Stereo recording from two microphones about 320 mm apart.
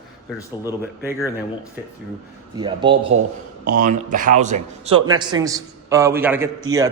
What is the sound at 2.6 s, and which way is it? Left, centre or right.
A man's voice, centre.